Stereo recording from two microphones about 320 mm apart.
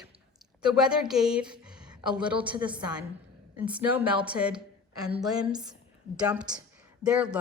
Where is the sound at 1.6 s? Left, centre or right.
Centre.